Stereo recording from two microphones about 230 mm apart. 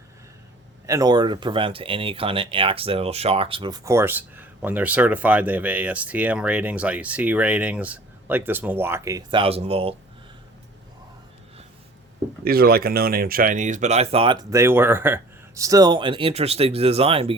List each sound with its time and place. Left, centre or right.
0.9 s speech: centre
12.5 s speech: right